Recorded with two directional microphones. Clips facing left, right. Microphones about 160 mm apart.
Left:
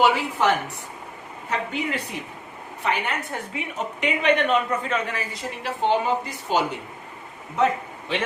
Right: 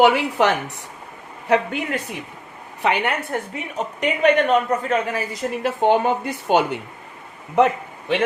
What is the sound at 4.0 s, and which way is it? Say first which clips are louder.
A woman's voice: right 4 dB; 45° right (ahead or behind).